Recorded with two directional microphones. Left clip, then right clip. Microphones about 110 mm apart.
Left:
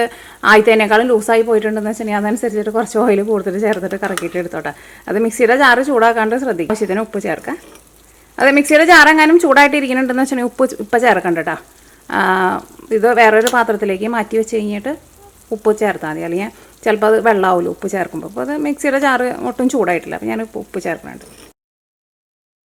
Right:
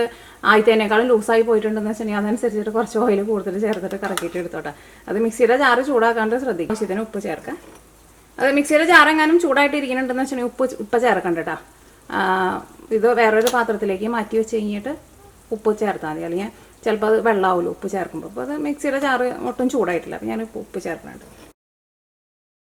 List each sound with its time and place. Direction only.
0.0 s a woman's voice: 40° left (ahead or behind)